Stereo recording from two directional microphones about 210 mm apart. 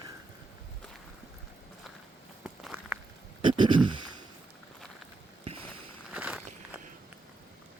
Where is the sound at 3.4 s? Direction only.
20° right (ahead or behind).